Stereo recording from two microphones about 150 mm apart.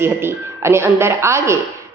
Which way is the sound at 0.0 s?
15° right (ahead or behind).